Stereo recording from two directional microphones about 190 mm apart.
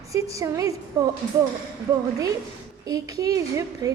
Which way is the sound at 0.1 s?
15° right (ahead or behind).